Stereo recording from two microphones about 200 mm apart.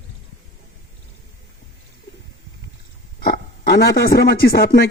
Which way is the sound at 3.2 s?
50° left (ahead or behind).